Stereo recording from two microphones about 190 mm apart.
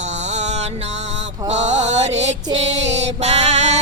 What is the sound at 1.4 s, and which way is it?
Music, 35° right (ahead or behind).